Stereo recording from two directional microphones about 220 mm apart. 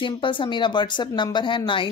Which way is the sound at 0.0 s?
20° left (ahead or behind).